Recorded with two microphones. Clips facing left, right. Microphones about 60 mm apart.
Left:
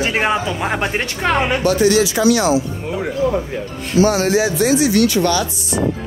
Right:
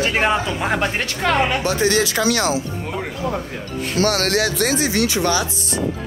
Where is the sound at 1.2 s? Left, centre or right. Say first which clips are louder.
Left 1 dB; centre.